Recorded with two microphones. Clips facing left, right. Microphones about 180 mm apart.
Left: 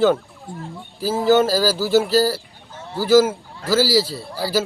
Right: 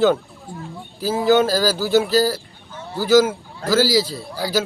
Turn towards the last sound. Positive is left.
turn(degrees=5)  # may be behind; listen again after turning